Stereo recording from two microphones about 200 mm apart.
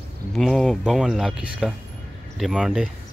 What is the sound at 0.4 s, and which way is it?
Speech, centre (ahead or behind).